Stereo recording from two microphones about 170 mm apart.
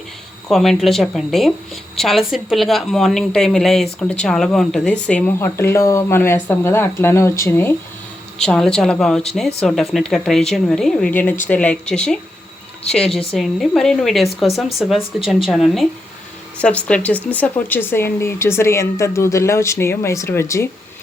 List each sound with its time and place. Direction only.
0.4 s a woman's voice: centre (ahead or behind)
8.4 s a woman's voice: 5° left (ahead or behind)